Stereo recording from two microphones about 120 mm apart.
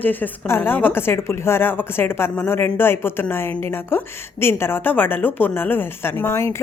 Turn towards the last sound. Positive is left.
turn(degrees=20)  # may be behind; listen again after turning